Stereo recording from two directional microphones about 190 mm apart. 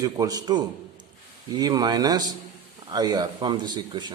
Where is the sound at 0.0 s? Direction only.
20° right (ahead or behind).